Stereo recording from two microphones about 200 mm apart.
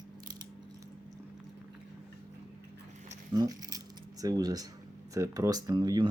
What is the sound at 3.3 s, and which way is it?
Dog, 20° right (ahead or behind).